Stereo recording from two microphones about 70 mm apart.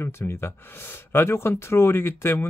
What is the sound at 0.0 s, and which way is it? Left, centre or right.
Speech, left.